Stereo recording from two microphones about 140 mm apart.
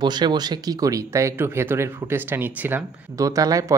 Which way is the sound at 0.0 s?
30° right (ahead or behind).